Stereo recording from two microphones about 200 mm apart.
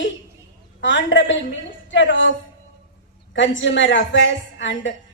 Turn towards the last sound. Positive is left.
turn(degrees=65)  # may be behind; listen again after turning